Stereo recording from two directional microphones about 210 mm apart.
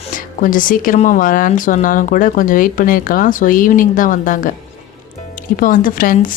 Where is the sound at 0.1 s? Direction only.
40° left (ahead or behind).